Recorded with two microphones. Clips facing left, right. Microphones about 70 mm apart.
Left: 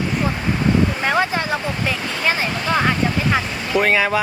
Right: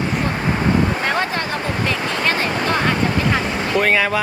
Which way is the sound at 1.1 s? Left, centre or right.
Centre.